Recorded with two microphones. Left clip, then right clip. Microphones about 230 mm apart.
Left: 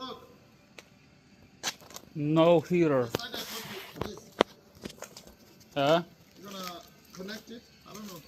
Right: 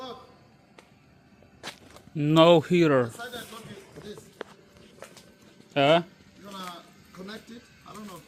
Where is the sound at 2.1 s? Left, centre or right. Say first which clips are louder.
Right 5 dB; right.